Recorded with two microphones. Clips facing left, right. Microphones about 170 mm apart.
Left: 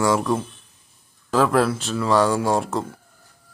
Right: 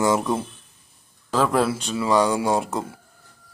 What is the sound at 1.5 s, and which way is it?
Speech, centre (ahead or behind).